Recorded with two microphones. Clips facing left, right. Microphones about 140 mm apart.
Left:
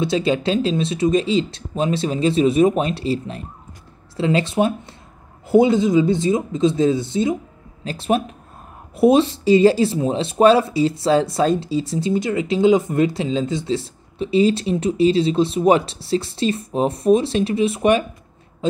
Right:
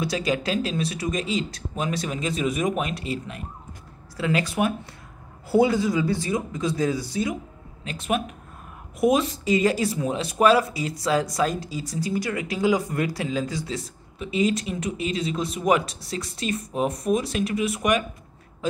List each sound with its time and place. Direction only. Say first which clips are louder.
0.0 s speech: left 6 dB; 25° left (ahead or behind)